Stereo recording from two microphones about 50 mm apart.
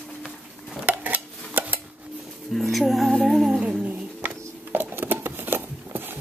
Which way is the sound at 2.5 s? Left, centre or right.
Centre.